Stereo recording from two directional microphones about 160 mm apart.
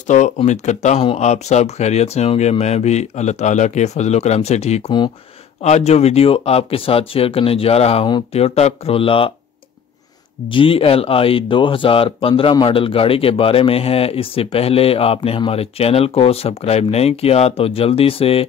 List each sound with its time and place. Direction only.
0.0 s speech: 50° left (ahead or behind)
10.5 s speech: 35° left (ahead or behind)